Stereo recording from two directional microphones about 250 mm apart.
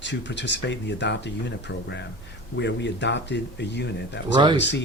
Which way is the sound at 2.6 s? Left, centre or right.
Left.